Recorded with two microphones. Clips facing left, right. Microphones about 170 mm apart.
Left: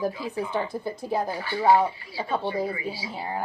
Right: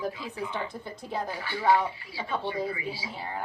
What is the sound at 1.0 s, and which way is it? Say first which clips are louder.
Speech: left 6 dB; 10° left (ahead or behind).